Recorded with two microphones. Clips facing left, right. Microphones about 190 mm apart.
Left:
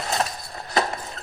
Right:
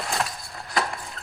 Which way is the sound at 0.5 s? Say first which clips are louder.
Left 3 dB; 25° left (ahead or behind).